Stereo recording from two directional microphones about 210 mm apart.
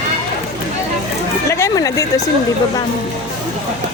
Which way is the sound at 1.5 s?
15° left (ahead or behind).